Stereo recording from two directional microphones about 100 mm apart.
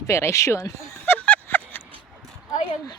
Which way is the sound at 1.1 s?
15° left (ahead or behind).